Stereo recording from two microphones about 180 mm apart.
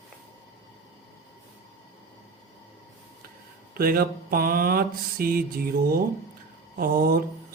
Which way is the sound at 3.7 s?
55° right (ahead or behind).